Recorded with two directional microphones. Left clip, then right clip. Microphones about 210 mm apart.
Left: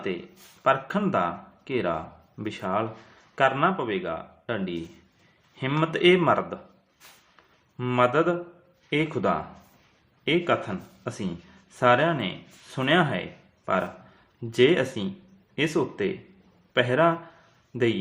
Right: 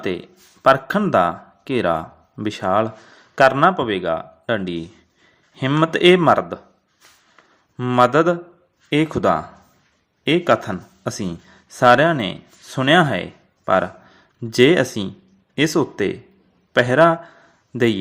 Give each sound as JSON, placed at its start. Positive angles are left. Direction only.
{"t": 0.6, "sound": "speech", "side_deg": -40}
{"t": 7.8, "sound": "speech", "side_deg": -35}